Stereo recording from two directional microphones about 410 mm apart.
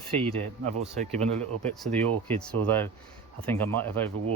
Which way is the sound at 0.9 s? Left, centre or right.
Centre.